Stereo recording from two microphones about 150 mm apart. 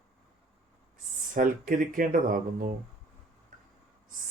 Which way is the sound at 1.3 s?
65° right (ahead or behind).